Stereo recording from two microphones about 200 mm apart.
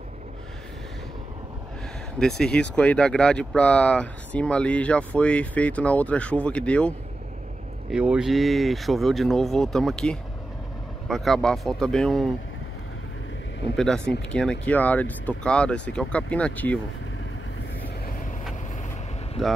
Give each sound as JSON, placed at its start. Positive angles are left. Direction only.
{"t": 2.1, "sound": "speech", "side_deg": 5}
{"t": 7.9, "sound": "speech", "side_deg": -5}
{"t": 13.7, "sound": "speech", "side_deg": 5}
{"t": 19.4, "sound": "speech", "side_deg": 0}